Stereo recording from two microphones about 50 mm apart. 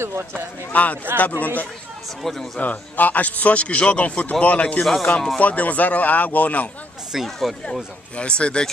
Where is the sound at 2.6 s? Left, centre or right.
Left.